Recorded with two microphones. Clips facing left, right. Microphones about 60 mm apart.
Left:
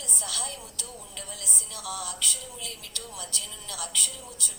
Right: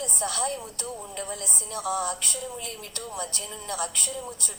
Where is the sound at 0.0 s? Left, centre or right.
Right.